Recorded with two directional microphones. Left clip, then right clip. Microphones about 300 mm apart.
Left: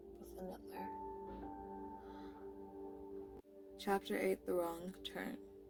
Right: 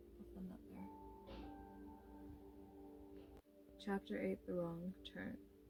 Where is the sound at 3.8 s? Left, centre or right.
Centre.